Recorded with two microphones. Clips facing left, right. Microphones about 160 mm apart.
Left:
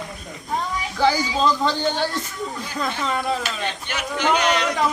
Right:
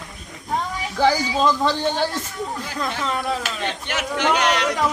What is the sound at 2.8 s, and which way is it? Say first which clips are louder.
Speech: left 1 dB; centre (ahead or behind).